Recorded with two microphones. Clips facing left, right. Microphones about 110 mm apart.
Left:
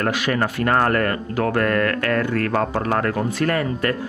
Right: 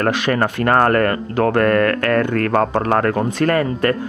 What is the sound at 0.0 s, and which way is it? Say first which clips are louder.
Speech: right 4 dB; 45° right (ahead or behind).